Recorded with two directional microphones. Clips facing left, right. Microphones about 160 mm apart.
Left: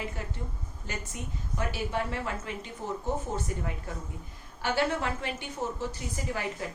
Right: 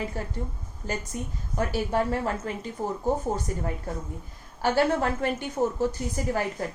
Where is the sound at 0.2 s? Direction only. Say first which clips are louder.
Right 5 dB; 40° right (ahead or behind).